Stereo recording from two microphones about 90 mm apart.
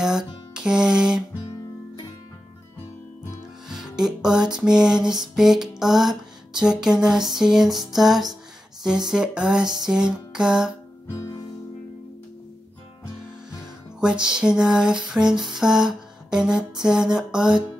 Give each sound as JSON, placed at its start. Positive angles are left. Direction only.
{"t": 0.0, "sound": "music", "side_deg": -5}
{"t": 3.6, "sound": "music", "side_deg": -5}
{"t": 11.1, "sound": "music", "side_deg": 35}
{"t": 13.9, "sound": "music", "side_deg": -10}